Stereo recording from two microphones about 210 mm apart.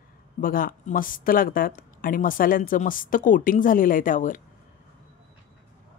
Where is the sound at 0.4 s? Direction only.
40° left (ahead or behind).